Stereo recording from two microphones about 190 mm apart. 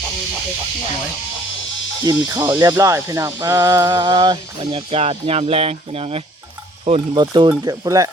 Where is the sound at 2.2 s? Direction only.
20° right (ahead or behind).